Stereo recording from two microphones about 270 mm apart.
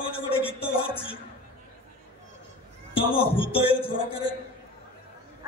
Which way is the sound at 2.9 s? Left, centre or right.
Centre.